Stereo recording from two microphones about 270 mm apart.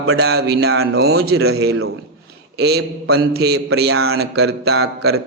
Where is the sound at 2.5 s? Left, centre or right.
Right.